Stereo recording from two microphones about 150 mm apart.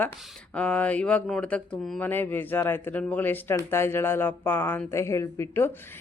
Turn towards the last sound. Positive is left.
turn(degrees=15)  # may be behind; listen again after turning